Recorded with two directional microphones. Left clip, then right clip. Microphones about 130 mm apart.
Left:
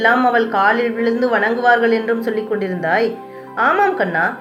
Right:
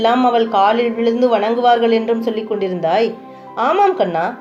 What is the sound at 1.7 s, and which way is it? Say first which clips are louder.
Speech: right 1 dB; 55° right (ahead or behind).